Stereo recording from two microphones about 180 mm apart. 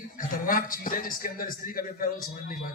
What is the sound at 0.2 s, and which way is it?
A man's voice, 50° left (ahead or behind).